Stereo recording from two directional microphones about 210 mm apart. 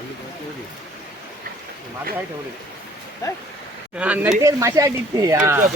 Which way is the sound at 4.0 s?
5° right (ahead or behind).